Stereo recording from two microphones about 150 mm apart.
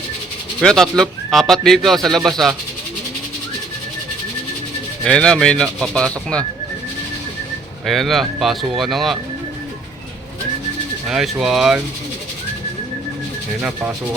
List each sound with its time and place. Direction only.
0.6 s speech: 5° left (ahead or behind)
5.0 s speech: 5° left (ahead or behind)
7.9 s speech: centre (ahead or behind)
11.1 s speech: 5° right (ahead or behind)
13.6 s speech: 5° right (ahead or behind)